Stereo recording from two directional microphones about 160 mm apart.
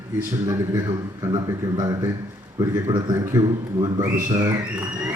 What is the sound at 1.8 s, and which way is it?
A man's voice, 20° right (ahead or behind).